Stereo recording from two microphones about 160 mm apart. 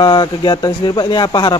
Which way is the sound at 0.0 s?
25° left (ahead or behind).